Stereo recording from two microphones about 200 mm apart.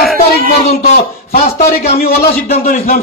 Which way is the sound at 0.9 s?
45° left (ahead or behind).